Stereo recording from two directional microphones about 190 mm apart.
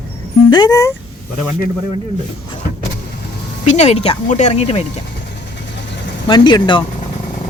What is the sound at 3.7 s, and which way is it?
Speech, 35° left (ahead or behind).